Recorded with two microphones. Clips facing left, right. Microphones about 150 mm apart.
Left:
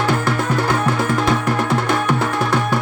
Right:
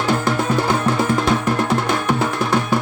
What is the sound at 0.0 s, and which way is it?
Music, 20° right (ahead or behind).